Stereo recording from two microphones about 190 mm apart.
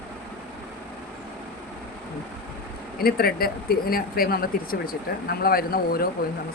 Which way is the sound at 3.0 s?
55° left (ahead or behind).